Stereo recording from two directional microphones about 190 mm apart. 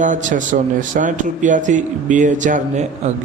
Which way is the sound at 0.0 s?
40° right (ahead or behind).